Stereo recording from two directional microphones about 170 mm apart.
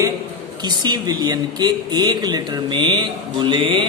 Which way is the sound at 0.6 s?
25° right (ahead or behind).